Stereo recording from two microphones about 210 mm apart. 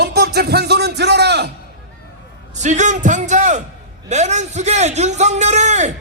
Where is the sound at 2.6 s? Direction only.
35° right (ahead or behind).